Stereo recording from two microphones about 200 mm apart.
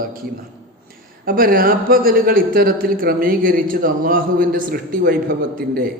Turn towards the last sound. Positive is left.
turn(degrees=-50)  # may be behind; listen again after turning